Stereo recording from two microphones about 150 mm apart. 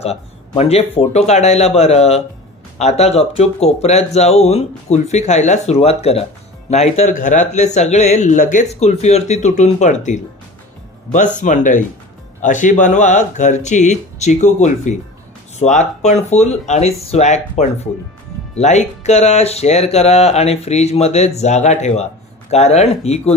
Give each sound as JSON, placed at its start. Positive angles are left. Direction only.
{"t": 0.0, "sound": "speech", "side_deg": 45}
{"t": 11.3, "sound": "speech", "side_deg": 55}